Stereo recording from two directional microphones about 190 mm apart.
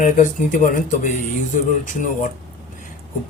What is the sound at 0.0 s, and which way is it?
Speech, 45° left (ahead or behind).